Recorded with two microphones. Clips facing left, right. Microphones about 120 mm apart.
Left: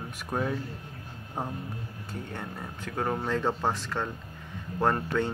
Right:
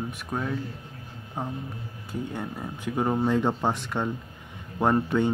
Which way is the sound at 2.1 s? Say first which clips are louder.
Right 6 dB; 10° right (ahead or behind).